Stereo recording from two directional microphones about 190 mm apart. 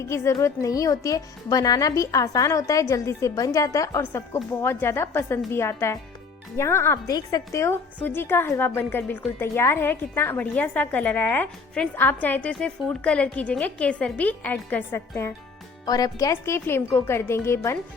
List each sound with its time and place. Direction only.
0.0 s a woman's voice: 15° left (ahead or behind)